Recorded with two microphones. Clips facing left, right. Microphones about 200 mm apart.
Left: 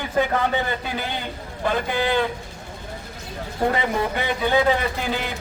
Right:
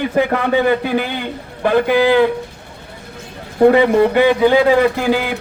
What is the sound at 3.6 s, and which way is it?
Speech, 65° right (ahead or behind).